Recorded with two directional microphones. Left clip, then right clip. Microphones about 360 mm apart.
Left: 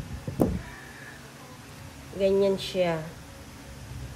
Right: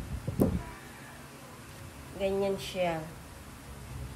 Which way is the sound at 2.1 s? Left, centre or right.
Left.